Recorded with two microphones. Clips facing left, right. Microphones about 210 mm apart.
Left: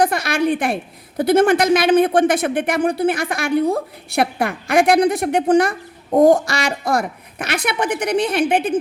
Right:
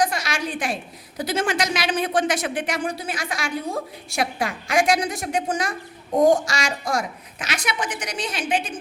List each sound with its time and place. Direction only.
0.0 s a woman's voice: 55° left (ahead or behind)